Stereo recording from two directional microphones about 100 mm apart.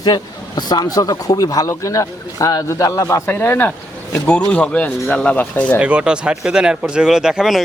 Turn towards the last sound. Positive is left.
turn(degrees=-5)  # may be behind; listen again after turning